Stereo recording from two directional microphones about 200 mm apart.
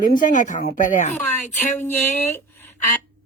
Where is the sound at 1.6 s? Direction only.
10° left (ahead or behind).